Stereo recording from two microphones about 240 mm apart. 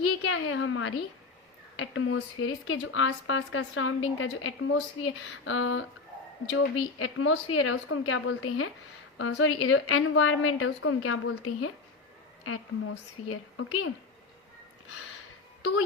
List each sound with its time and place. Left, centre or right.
0.0 s a woman's voice: left